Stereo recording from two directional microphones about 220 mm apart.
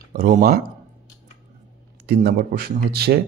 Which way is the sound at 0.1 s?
40° right (ahead or behind).